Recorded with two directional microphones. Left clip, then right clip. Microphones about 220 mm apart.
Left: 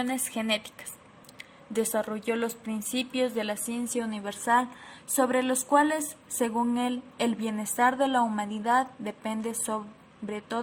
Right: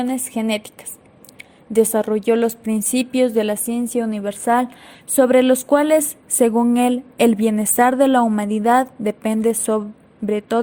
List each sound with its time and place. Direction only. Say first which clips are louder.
0.0 s a woman's voice: right 8 dB; 20° right (ahead or behind)